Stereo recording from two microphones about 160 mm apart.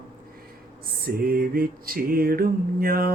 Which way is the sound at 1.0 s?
65° right (ahead or behind).